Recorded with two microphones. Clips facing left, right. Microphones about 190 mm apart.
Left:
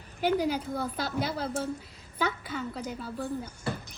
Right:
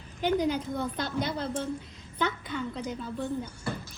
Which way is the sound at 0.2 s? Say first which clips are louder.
Even; 10° left (ahead or behind).